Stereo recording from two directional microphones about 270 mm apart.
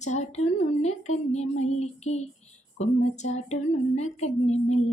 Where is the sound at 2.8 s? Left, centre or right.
Left.